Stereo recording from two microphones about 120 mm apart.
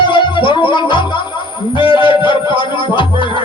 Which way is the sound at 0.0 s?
40° left (ahead or behind).